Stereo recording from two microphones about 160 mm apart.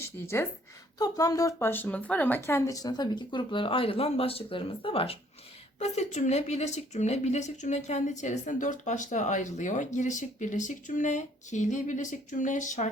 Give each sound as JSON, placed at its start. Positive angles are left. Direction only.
{"t": 0.0, "sound": "speech", "side_deg": 15}
{"t": 5.8, "sound": "speech", "side_deg": 45}